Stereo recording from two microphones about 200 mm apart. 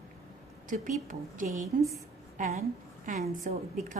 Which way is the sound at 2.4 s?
35° right (ahead or behind).